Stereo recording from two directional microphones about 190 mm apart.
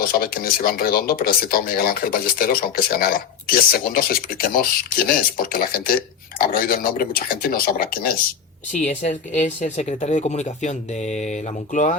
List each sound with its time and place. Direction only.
0.0 s speech: 50° left (ahead or behind)
8.7 s speech: 40° left (ahead or behind)